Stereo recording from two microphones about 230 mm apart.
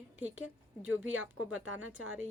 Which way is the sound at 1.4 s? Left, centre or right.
Right.